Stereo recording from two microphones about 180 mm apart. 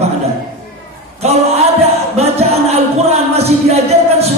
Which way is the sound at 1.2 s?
35° right (ahead or behind).